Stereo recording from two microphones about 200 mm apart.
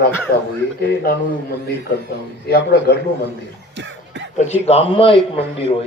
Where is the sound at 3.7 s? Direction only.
65° right (ahead or behind).